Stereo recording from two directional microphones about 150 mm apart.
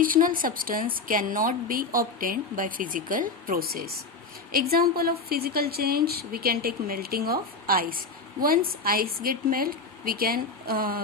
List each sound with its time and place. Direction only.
0.0 s a woman's voice: 70° right (ahead or behind)